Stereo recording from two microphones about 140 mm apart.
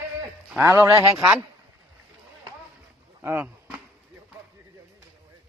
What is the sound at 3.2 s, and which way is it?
Speech, 15° right (ahead or behind).